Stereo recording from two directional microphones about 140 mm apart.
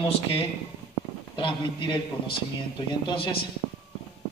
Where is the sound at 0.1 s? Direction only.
40° left (ahead or behind).